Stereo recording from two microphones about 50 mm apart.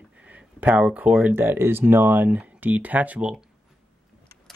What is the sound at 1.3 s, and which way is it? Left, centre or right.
Speech, right.